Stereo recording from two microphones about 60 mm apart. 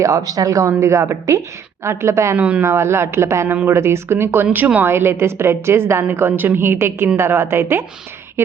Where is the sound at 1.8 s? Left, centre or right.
Right.